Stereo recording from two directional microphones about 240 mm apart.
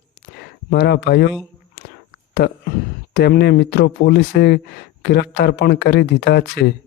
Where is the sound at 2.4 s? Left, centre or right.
Left.